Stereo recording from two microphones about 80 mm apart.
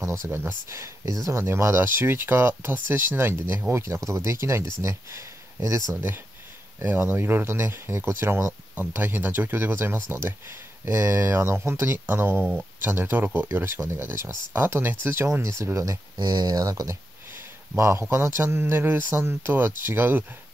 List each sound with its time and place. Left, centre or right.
0.0 s speech: right
5.9 s speech: right
16.2 s speech: right
17.3 s a sound: right
18.1 s speech: right